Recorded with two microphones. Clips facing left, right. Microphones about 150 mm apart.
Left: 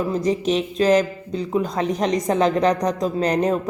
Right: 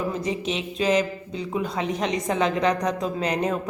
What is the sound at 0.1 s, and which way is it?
A woman's voice, 40° left (ahead or behind).